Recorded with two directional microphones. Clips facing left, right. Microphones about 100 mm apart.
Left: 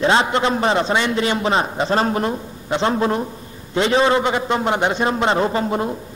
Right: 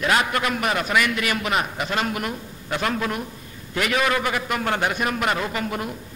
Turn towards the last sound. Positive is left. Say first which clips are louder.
# left 7 dB
turn(degrees=25)  # may be behind; listen again after turning